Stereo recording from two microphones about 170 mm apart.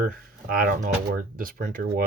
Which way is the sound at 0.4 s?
60° right (ahead or behind).